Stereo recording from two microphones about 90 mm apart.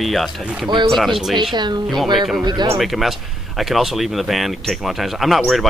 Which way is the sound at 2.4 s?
55° right (ahead or behind).